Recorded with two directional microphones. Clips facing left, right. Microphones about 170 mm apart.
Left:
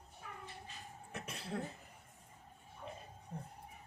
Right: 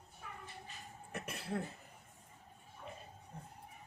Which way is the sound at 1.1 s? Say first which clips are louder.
Right 2 dB; 5° right (ahead or behind).